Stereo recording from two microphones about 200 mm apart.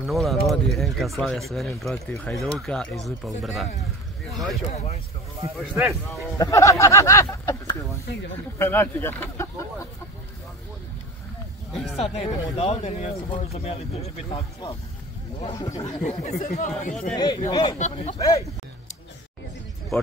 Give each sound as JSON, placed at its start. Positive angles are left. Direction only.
{"t": 0.0, "sound": "speech", "side_deg": 0}
{"t": 4.3, "sound": "boat", "side_deg": 0}
{"t": 4.7, "sound": "speech", "side_deg": 35}
{"t": 5.6, "sound": "speech", "side_deg": 0}
{"t": 6.3, "sound": "speech", "side_deg": 15}
{"t": 12.0, "sound": "speech", "side_deg": 30}
{"t": 15.4, "sound": "speech", "side_deg": 20}
{"t": 16.0, "sound": "speech", "side_deg": 35}
{"t": 17.1, "sound": "speech", "side_deg": 20}
{"t": 17.7, "sound": "speech", "side_deg": 35}
{"t": 18.1, "sound": "speech", "side_deg": 15}